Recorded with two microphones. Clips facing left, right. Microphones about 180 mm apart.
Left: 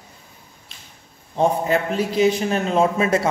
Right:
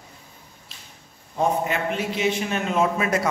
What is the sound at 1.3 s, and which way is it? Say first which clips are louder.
A man's voice: left 4 dB; 35° left (ahead or behind).